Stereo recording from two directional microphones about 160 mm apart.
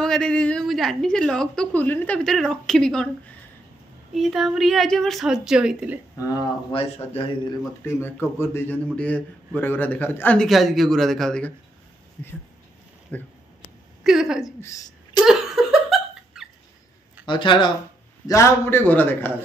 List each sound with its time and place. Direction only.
0.0 s a woman's voice: 5° left (ahead or behind)
4.1 s a woman's voice: centre (ahead or behind)
6.7 s a man's voice: 35° left (ahead or behind)
7.8 s a man's voice: 15° left (ahead or behind)
13.1 s a man's voice: 10° left (ahead or behind)
14.0 s a woman's voice: 5° right (ahead or behind)
14.6 s speech: 20° left (ahead or behind)
15.2 s laughter: 5° right (ahead or behind)
17.3 s speech: 30° left (ahead or behind)
18.2 s a man's voice: 20° left (ahead or behind)